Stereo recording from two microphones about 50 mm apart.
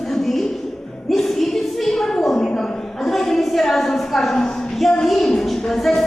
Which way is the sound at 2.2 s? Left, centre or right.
Left.